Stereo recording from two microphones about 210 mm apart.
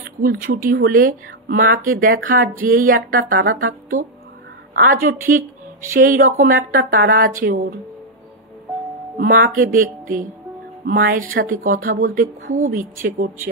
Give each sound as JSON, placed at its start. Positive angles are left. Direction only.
{"t": 0.2, "sound": "speech", "side_deg": -45}
{"t": 9.1, "sound": "speech", "side_deg": -40}